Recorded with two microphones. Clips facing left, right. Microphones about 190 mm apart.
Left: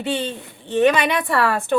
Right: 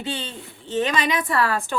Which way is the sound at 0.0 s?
60° left (ahead or behind).